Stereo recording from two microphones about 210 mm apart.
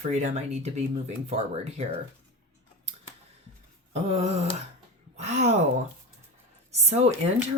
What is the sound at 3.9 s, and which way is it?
Speech, 30° right (ahead or behind).